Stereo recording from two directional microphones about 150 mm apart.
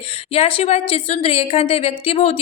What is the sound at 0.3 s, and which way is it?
A woman's voice, 40° left (ahead or behind).